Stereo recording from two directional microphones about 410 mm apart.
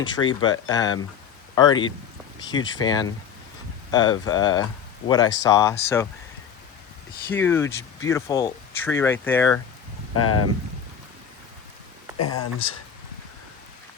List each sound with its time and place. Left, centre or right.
0.2 s speech: centre
7.3 s speech: centre
10.2 s speech: left
12.1 s speech: left